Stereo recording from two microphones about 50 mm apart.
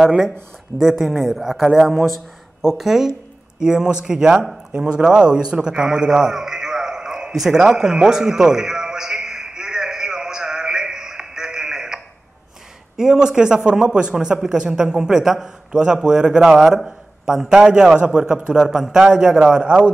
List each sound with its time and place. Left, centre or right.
0.7 s a man's voice: centre
2.6 s a man's voice: centre
7.3 s music: centre
12.9 s a man's voice: centre